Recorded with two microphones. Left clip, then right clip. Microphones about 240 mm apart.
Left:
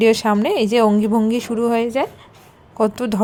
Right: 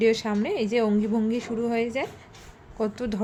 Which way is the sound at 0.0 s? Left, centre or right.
Left.